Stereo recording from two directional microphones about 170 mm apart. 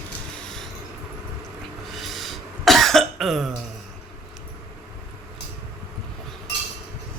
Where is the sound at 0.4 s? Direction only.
Centre (ahead or behind).